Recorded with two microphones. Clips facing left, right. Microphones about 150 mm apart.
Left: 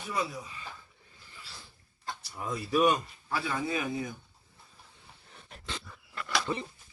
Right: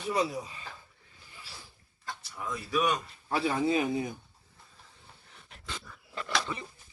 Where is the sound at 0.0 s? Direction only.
25° right (ahead or behind).